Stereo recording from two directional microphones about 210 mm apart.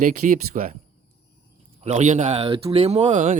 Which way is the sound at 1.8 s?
35° right (ahead or behind).